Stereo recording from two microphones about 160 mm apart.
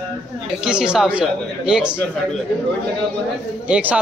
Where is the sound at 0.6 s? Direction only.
5° right (ahead or behind).